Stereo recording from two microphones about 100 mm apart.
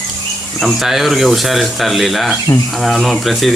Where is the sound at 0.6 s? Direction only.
5° right (ahead or behind).